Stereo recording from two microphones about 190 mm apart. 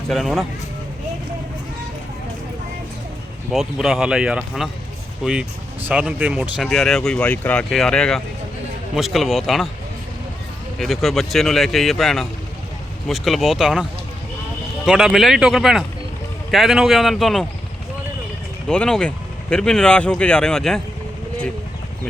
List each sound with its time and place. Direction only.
0.1 s speech: centre (ahead or behind)
3.5 s speech: centre (ahead or behind)
10.8 s speech: centre (ahead or behind)
14.8 s speech: 5° right (ahead or behind)
18.7 s speech: 5° left (ahead or behind)